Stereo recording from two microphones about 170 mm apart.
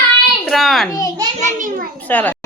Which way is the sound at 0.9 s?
20° left (ahead or behind).